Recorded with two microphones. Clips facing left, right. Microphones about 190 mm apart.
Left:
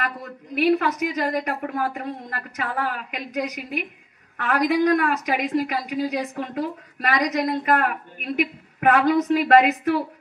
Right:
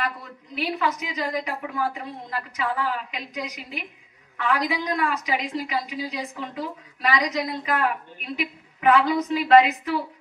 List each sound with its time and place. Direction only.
0.6 s a woman's voice: 55° left (ahead or behind)